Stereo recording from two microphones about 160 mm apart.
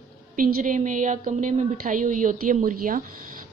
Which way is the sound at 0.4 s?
60° right (ahead or behind).